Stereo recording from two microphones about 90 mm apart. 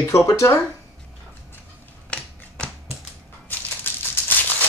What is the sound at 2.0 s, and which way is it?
Typewriter, 10° left (ahead or behind).